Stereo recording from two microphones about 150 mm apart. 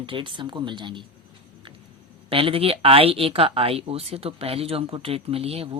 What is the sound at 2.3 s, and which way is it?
Speech, 40° right (ahead or behind).